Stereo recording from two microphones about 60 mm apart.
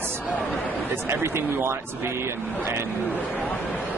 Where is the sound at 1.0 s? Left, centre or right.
Right.